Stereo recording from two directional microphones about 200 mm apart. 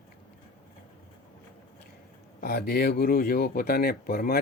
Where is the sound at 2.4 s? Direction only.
50° left (ahead or behind).